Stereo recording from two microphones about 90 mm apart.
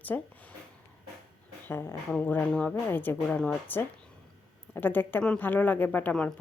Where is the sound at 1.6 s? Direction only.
30° left (ahead or behind).